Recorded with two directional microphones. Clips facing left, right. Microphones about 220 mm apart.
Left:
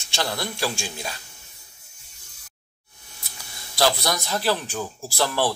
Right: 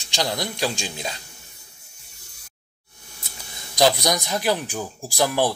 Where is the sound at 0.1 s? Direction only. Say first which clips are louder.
Right 2 dB; 15° right (ahead or behind).